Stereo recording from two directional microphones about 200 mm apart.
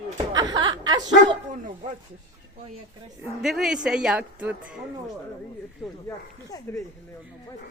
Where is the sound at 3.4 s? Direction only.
Centre (ahead or behind).